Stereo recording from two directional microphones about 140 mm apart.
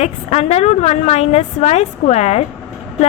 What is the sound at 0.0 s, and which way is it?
A woman's voice, 50° left (ahead or behind).